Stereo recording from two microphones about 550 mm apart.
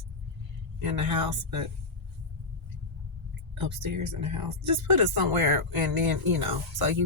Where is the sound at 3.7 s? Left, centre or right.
Right.